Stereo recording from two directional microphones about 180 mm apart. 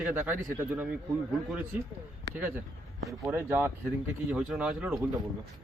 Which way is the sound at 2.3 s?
10° right (ahead or behind).